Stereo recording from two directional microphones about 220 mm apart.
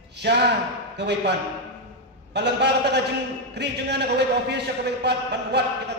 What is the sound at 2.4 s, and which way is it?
A man's voice, 50° right (ahead or behind).